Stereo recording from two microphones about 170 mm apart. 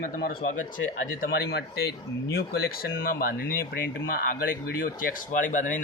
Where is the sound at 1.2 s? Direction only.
65° left (ahead or behind).